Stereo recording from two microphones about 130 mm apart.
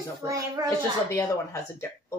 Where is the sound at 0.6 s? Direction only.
30° right (ahead or behind).